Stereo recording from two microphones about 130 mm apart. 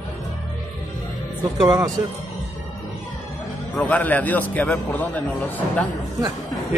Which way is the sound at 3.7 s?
10° left (ahead or behind).